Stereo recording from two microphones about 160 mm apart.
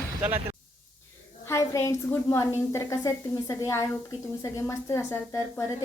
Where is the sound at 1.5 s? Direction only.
20° left (ahead or behind).